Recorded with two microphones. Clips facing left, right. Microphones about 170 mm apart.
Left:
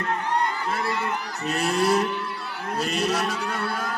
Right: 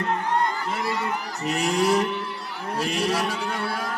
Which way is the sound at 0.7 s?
15° right (ahead or behind).